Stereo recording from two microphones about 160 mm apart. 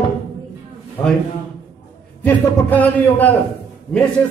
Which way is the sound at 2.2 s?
10° left (ahead or behind).